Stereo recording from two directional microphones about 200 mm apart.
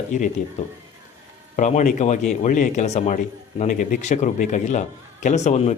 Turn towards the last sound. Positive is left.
turn(degrees=35)  # may be behind; listen again after turning